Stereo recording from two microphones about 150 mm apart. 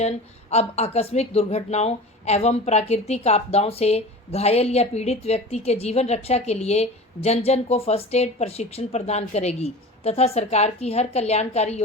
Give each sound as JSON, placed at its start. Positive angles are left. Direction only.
{"t": 0.5, "sound": "a woman's voice", "side_deg": 45}